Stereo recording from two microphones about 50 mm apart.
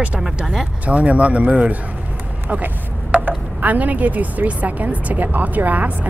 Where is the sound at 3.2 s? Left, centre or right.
Right.